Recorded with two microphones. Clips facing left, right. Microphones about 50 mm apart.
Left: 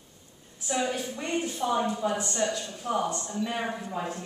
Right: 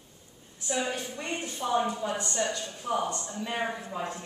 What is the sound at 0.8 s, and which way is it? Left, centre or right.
A woman's voice, centre.